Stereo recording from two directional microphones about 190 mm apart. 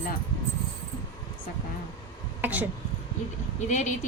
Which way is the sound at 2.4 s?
10° right (ahead or behind).